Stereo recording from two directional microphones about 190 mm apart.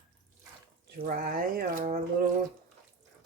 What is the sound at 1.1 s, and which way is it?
Speech, 50° right (ahead or behind).